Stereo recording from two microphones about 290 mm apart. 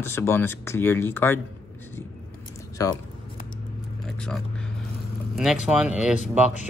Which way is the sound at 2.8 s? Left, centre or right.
Centre.